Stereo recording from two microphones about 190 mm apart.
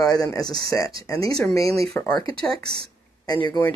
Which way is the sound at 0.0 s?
20° left (ahead or behind).